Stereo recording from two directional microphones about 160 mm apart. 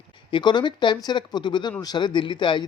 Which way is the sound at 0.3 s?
30° left (ahead or behind).